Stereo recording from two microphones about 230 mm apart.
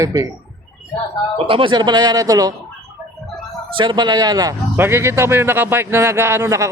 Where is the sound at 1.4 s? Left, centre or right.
Right.